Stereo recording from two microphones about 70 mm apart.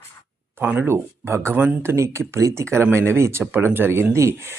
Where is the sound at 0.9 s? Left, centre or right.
Right.